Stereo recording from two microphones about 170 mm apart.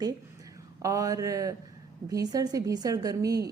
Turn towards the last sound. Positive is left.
turn(degrees=-20)  # may be behind; listen again after turning